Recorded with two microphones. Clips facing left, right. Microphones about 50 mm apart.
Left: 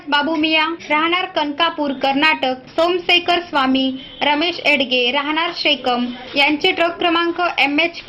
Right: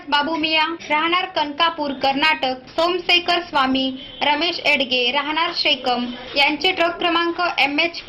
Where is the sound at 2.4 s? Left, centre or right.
Left.